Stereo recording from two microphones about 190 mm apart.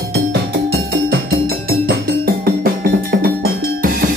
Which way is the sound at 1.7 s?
50° right (ahead or behind).